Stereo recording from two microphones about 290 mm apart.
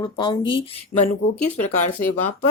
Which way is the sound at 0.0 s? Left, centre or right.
Centre.